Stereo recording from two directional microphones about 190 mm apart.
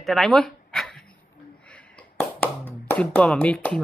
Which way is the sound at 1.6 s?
5° left (ahead or behind).